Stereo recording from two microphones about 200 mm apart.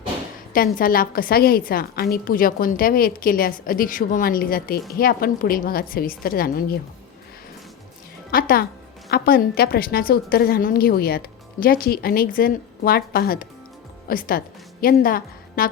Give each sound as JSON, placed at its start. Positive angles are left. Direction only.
{"t": 0.5, "sound": "a woman's voice", "side_deg": 45}
{"t": 8.3, "sound": "a woman's voice", "side_deg": 45}